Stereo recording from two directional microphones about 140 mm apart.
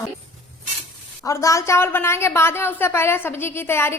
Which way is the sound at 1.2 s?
20° left (ahead or behind).